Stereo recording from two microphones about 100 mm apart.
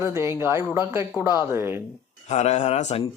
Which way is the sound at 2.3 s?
90° left.